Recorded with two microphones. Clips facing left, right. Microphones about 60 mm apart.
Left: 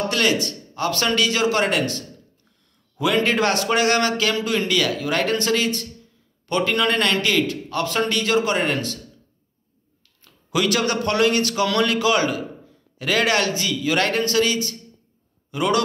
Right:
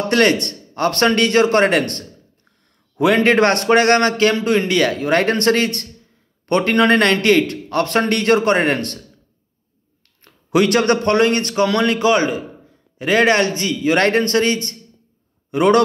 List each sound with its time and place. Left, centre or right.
0.1 s a man's voice: right
10.2 s a man's voice: right